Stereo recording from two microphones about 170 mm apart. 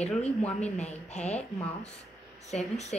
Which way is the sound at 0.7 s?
40° left (ahead or behind).